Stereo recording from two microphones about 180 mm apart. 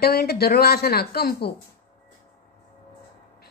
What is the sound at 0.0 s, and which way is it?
A woman's voice, 60° left (ahead or behind).